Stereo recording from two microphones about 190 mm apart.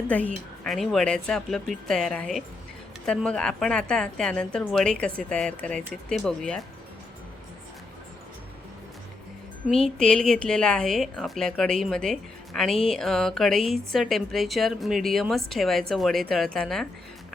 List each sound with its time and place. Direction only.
0.1 s a woman's voice: 5° left (ahead or behind)
9.6 s a woman's voice: 5° left (ahead or behind)